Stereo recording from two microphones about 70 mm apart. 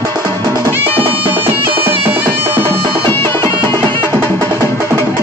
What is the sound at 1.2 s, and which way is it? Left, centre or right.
Music, right.